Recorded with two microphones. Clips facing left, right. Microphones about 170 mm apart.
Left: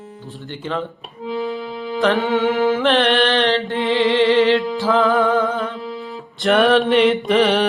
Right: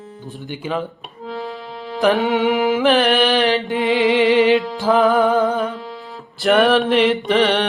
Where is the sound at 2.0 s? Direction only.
Centre (ahead or behind).